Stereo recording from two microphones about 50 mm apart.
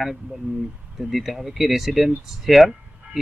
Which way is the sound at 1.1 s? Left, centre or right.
Centre.